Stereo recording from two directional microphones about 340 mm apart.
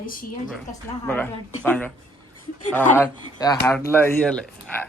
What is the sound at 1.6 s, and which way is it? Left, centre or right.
Speech, centre.